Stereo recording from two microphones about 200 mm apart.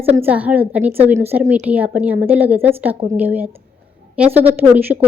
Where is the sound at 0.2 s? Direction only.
10° right (ahead or behind).